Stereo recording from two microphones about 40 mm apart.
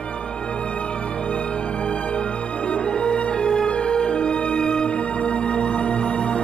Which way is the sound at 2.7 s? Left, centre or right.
Left.